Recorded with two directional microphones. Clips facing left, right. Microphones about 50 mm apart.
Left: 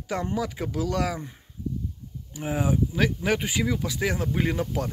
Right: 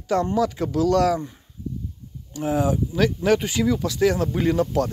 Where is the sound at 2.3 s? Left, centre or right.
Centre.